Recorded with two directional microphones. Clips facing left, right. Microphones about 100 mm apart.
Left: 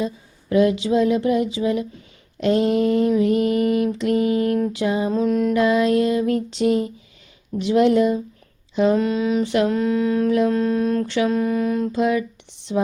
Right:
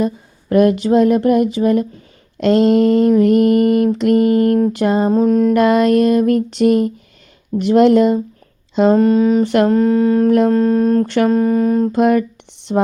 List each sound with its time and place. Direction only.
0.5 s speech: 55° right (ahead or behind)
5.1 s mantra: 40° right (ahead or behind)
5.5 s speech: 65° right (ahead or behind)
8.7 s a sound: 65° right (ahead or behind)
9.0 s mantra: 40° right (ahead or behind)
11.9 s speech: 60° right (ahead or behind)